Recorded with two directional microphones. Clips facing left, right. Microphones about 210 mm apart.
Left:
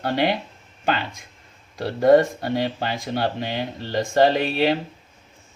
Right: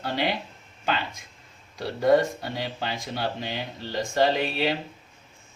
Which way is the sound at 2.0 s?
55° left (ahead or behind).